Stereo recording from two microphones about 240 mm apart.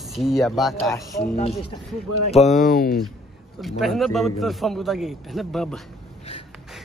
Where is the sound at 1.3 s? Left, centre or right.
Left.